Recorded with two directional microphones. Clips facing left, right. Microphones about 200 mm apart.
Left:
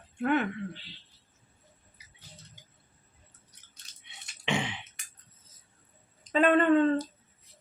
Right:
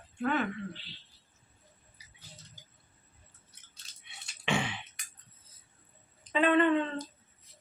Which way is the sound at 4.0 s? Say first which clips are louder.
Even; 20° left (ahead or behind).